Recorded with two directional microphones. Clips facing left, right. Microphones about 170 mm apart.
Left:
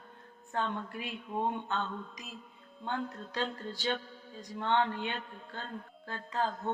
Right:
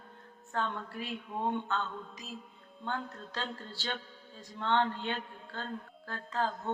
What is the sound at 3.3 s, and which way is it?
A woman's voice, 15° left (ahead or behind).